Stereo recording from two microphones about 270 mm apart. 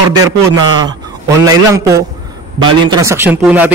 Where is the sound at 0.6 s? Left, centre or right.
Centre.